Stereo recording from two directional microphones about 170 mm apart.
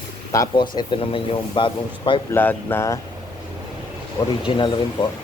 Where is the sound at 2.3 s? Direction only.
10° left (ahead or behind).